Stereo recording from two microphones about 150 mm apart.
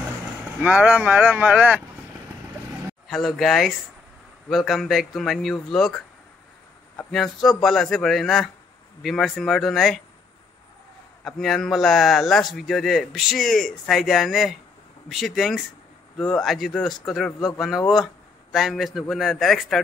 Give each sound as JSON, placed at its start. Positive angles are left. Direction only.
{"t": 0.6, "sound": "speech", "side_deg": -10}
{"t": 3.1, "sound": "a man's voice", "side_deg": 0}
{"t": 11.2, "sound": "a man's voice", "side_deg": 0}